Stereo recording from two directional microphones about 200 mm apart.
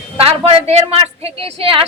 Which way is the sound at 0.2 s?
30° right (ahead or behind).